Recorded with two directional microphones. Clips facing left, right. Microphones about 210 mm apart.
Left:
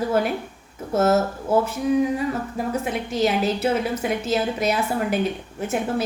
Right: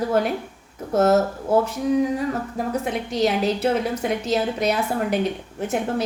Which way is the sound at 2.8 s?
5° left (ahead or behind).